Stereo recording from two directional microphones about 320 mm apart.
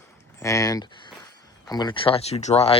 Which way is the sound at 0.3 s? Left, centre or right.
Centre.